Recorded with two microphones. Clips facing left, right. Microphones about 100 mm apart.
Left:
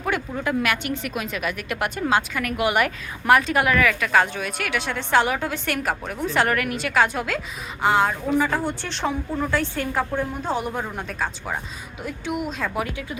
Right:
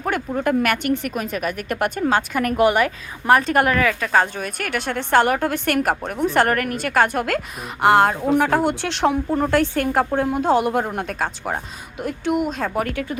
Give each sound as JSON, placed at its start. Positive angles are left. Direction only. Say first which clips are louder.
{"t": 0.3, "sound": "a woman's voice", "louder": "right 7 dB", "side_deg": -50}
{"t": 3.4, "sound": "a woman's voice", "louder": "right 3 dB", "side_deg": -45}
{"t": 3.8, "sound": "a woman's voice", "louder": "right 1 dB", "side_deg": -30}
{"t": 9.3, "sound": "a woman's voice", "louder": "right 6 dB", "side_deg": -55}
{"t": 10.3, "sound": "a woman's voice", "louder": "right 8 dB", "side_deg": -85}
{"t": 12.5, "sound": "a woman's voice", "louder": "right 4 dB", "side_deg": -45}